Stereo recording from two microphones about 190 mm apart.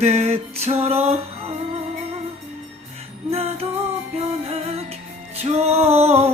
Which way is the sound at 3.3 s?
30° right (ahead or behind).